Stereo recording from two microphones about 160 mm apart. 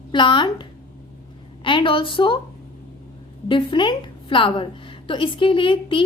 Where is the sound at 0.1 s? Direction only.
30° left (ahead or behind).